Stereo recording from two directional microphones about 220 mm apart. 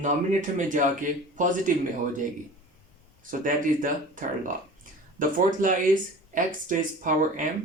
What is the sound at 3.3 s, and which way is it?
Speech, 35° right (ahead or behind).